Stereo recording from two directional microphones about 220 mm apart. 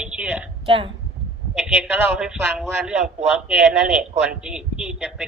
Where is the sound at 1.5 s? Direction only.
5° right (ahead or behind).